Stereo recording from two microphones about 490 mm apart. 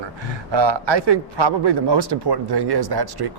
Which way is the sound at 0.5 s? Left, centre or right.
Right.